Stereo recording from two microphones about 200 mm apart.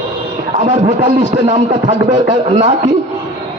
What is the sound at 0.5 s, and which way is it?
A man's voice, 35° right (ahead or behind).